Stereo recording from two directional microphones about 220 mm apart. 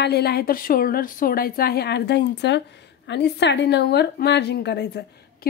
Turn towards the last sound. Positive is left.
turn(degrees=50)  # may be behind; listen again after turning